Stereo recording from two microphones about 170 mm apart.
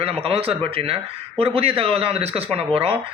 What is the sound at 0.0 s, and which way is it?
A man's voice, 35° right (ahead or behind).